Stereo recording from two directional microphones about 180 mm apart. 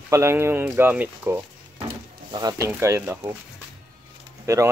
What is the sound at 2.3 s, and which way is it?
Speech, 20° right (ahead or behind).